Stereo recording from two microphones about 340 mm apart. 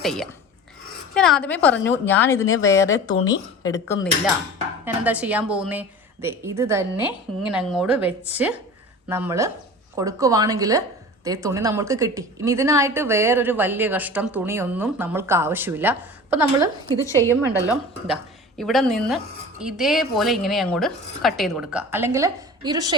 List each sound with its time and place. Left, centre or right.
0.0 s a woman's voice: centre
3.2 s speech: left
4.9 s a woman's voice: centre
17.0 s a woman's voice: centre